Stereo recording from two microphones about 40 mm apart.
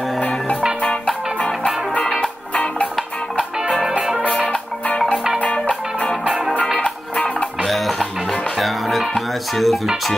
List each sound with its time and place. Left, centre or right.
1.0 s music: centre
6.8 s music: left
7.6 s music: centre